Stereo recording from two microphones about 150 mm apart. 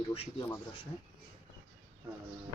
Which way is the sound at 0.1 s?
40° left (ahead or behind).